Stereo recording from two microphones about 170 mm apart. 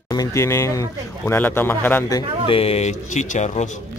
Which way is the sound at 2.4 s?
35° left (ahead or behind).